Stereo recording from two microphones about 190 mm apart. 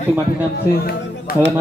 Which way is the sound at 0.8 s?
55° left (ahead or behind).